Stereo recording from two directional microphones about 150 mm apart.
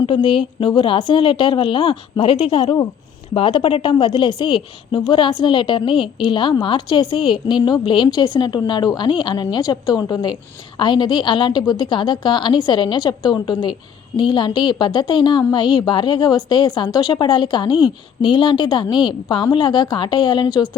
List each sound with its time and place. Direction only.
0.0 s a woman's voice: 35° left (ahead or behind)